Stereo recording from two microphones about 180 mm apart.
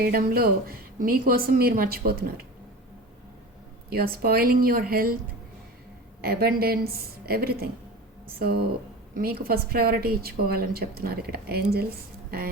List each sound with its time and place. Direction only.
0.0 s a woman's voice: 55° right (ahead or behind)
3.8 s a woman's voice: 55° right (ahead or behind)
6.2 s a woman's voice: 60° right (ahead or behind)